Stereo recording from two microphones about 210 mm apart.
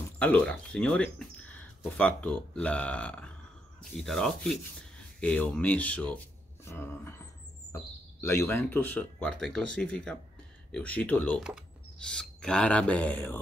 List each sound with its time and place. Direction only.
0.2 s speech: 5° left (ahead or behind)
6.6 s a sound: 10° left (ahead or behind)
7.7 s speech: 10° left (ahead or behind)